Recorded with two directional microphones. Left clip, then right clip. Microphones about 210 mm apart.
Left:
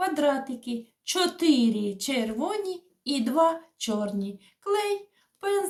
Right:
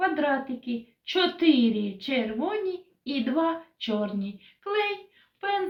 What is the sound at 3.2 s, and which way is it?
Speech, 60° left (ahead or behind).